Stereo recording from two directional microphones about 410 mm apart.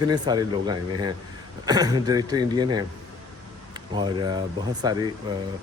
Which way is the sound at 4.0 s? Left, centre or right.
Centre.